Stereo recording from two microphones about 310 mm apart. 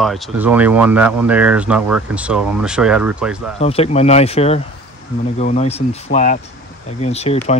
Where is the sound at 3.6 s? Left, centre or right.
Centre.